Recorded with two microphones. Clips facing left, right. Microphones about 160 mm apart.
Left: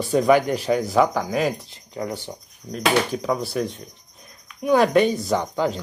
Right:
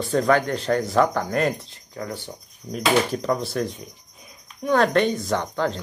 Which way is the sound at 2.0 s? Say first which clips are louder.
Left 3 dB; 15° left (ahead or behind).